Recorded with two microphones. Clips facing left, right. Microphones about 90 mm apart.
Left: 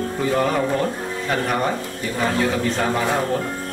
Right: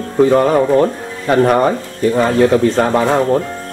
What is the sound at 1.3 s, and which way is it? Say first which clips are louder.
Speech: right 11 dB; 45° right (ahead or behind).